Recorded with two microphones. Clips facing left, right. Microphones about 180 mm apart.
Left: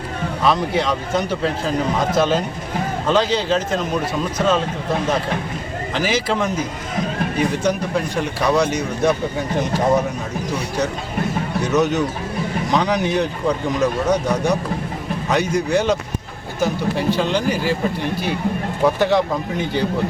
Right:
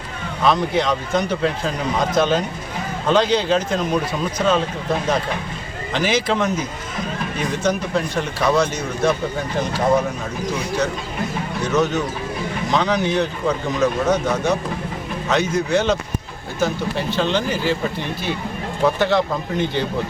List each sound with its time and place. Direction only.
0.4 s speech: 5° left (ahead or behind)
5.9 s speech: 5° left (ahead or behind)
7.6 s speech: 10° left (ahead or behind)
11.7 s speech: 15° left (ahead or behind)
17.1 s speech: 10° left (ahead or behind)
18.9 s speech: 10° left (ahead or behind)